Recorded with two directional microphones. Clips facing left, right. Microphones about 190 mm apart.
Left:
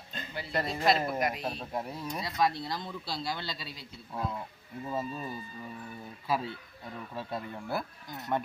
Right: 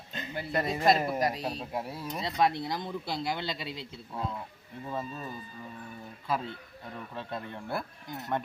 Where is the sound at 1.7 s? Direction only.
5° right (ahead or behind).